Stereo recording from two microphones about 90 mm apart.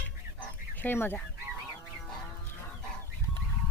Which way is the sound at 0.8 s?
20° left (ahead or behind).